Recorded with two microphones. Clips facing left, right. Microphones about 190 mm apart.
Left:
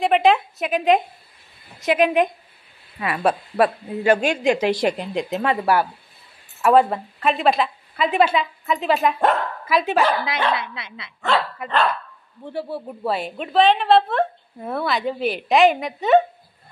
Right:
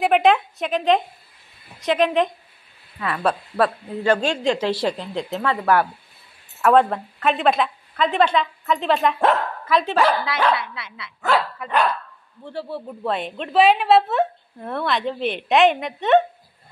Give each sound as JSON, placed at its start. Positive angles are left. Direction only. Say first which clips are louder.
{"t": 0.0, "sound": "a woman's voice", "louder": "even", "side_deg": 0}
{"t": 10.5, "sound": "a woman's voice", "louder": "right 1 dB", "side_deg": 20}